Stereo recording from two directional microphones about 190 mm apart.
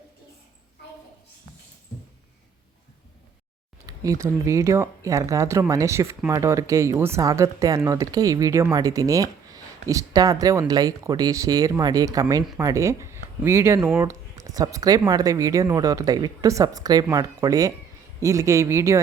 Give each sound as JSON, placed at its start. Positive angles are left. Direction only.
{"t": 3.8, "sound": "speech", "side_deg": -15}